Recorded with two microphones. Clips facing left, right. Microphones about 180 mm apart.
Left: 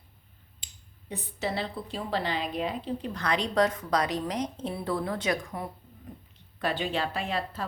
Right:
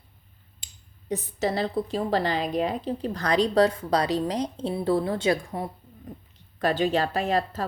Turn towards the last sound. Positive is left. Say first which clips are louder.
# right 7 dB
turn(degrees=-40)  # may be behind; listen again after turning